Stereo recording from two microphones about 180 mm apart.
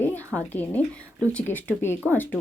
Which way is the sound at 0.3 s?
10° left (ahead or behind).